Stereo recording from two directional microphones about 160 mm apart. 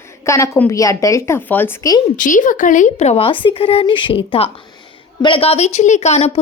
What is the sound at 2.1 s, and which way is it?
A woman's voice, 55° left (ahead or behind).